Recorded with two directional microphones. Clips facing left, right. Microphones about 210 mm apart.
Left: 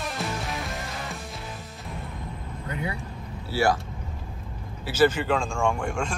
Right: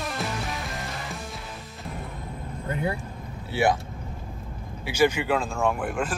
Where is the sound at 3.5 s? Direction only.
20° right (ahead or behind).